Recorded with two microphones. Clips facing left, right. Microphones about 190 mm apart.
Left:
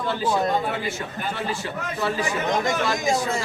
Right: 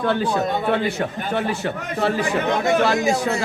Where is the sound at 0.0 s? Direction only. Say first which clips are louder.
Right 3 dB; 60° right (ahead or behind).